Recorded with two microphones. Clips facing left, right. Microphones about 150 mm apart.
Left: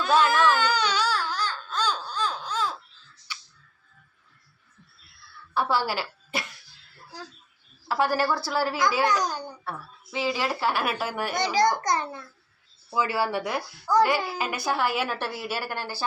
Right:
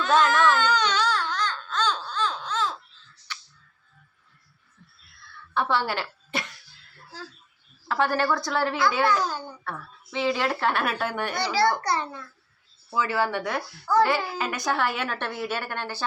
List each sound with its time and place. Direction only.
0.0 s baby cry: 10° left (ahead or behind)
5.5 s a woman's voice: 5° left (ahead or behind)
11.3 s speech: 20° left (ahead or behind)